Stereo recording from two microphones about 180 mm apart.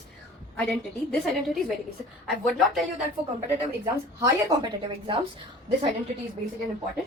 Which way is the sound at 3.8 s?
25° right (ahead or behind).